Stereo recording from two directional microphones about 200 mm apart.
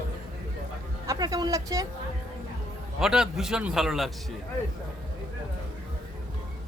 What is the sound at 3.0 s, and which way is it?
A man's voice, 5° right (ahead or behind).